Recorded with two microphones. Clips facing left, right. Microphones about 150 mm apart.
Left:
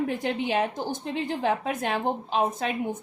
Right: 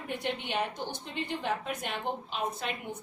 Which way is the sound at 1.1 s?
90° left.